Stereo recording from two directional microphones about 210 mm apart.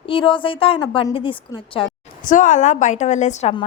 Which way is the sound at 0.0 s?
25° left (ahead or behind).